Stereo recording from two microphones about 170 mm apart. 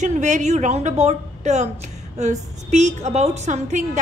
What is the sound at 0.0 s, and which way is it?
A woman's voice, 45° right (ahead or behind).